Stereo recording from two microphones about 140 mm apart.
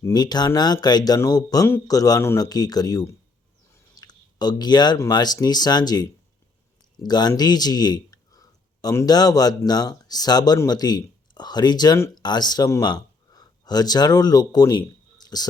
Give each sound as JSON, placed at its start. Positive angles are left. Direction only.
{"t": 0.0, "sound": "speech", "side_deg": 30}